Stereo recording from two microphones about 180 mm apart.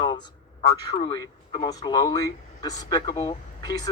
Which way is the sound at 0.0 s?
25° left (ahead or behind).